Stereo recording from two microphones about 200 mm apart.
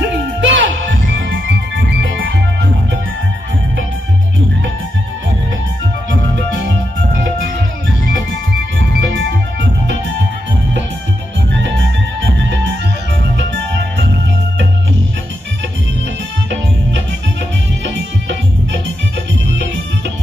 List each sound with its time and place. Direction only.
0.0 s music: 65° right (ahead or behind)
8.7 s music: 70° right (ahead or behind)
11.6 s music: 65° right (ahead or behind)
17.8 s music: 60° right (ahead or behind)